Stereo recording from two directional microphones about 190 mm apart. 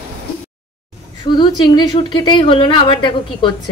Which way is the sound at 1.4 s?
25° left (ahead or behind).